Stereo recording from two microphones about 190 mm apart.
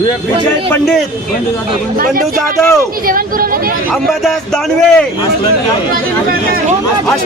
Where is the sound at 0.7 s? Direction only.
5° left (ahead or behind).